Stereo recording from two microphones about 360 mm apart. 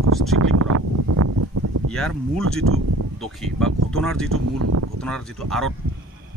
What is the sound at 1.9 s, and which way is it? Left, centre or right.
Speech, centre.